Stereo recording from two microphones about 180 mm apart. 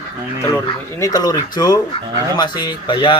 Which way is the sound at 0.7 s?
20° left (ahead or behind).